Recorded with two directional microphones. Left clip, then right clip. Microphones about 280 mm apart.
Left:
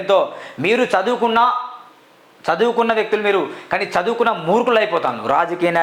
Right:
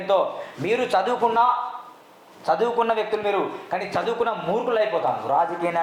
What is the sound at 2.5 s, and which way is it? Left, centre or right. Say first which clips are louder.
Speech: left 5 dB; left.